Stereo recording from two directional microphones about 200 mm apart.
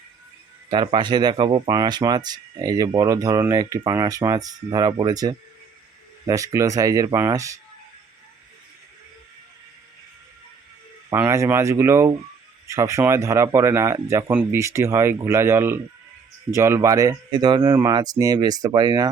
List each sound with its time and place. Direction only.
0.7 s speech: 25° right (ahead or behind)
11.1 s speech: 15° right (ahead or behind)